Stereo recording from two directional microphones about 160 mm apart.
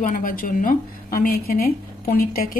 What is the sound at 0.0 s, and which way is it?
A woman's voice, 60° left (ahead or behind).